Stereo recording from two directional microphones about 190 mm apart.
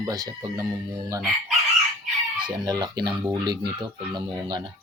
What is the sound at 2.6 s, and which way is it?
Speech, 20° right (ahead or behind).